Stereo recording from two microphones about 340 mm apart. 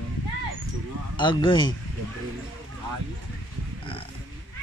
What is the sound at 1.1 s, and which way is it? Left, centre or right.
Speech, centre.